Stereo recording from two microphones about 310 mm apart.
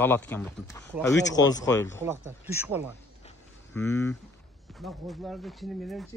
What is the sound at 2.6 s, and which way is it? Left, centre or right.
Speech, centre.